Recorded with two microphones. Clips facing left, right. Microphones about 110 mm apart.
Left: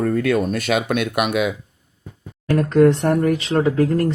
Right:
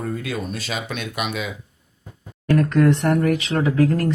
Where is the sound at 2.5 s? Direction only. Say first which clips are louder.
Left 3 dB; 25° left (ahead or behind).